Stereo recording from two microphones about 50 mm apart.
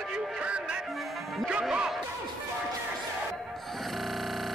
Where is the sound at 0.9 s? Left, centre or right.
Centre.